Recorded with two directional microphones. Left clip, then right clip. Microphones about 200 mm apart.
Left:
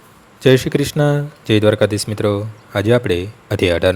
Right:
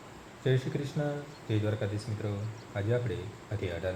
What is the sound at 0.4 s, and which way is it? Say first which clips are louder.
Speech: left 19 dB; 50° left (ahead or behind).